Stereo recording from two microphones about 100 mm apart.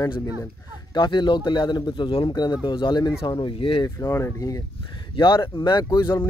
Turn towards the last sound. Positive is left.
turn(degrees=45)  # may be behind; listen again after turning